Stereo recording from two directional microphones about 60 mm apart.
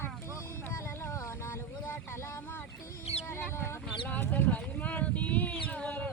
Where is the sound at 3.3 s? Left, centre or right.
Left.